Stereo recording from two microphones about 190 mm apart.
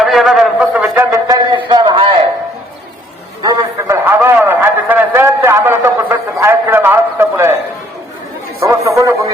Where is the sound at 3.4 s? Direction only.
15° right (ahead or behind).